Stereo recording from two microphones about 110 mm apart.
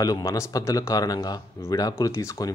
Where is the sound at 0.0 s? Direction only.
30° left (ahead or behind).